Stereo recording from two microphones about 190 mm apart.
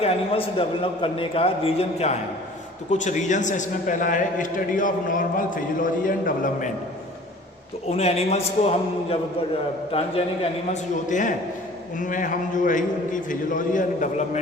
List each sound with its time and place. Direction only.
0.0 s a man's voice: 30° left (ahead or behind); by 6.7 s 45° left (ahead or behind)
7.9 s a man's voice: 35° left (ahead or behind)
11.1 s a man's voice: 40° left (ahead or behind)